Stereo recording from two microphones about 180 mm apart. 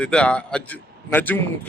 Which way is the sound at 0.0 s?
5° left (ahead or behind).